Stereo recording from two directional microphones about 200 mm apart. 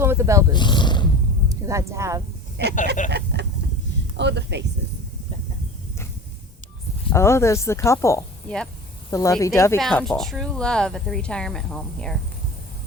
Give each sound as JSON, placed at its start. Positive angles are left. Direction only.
{"t": 0.0, "sound": "speech", "side_deg": -15}
{"t": 0.5, "sound": "speech", "side_deg": 20}
{"t": 1.5, "sound": "speech", "side_deg": -15}
{"t": 2.6, "sound": "a sound", "side_deg": -55}
{"t": 4.2, "sound": "speech", "side_deg": -60}
{"t": 7.1, "sound": "speech", "side_deg": 15}
{"t": 9.7, "sound": "speech", "side_deg": 0}